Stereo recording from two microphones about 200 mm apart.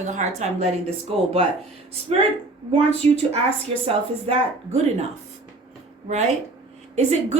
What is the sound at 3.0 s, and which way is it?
Speech, 30° right (ahead or behind).